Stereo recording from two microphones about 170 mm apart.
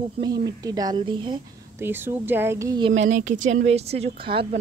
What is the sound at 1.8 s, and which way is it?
A woman's voice, 10° right (ahead or behind).